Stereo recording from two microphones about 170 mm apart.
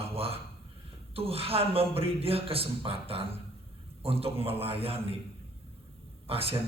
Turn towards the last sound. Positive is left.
turn(degrees=-35)  # may be behind; listen again after turning